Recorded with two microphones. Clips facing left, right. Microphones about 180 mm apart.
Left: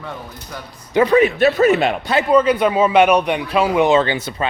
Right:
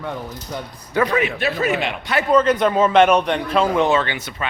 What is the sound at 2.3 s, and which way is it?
Speech, 10° left (ahead or behind).